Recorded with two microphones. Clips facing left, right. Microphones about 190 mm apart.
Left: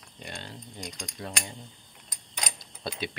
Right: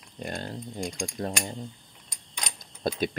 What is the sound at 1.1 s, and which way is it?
Speech, 30° right (ahead or behind).